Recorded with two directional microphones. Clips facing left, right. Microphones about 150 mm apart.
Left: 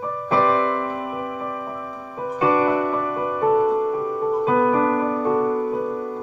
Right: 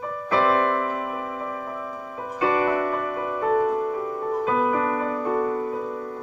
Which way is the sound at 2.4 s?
20° left (ahead or behind).